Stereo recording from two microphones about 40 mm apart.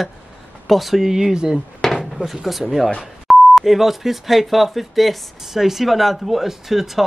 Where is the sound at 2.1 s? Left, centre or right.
Centre.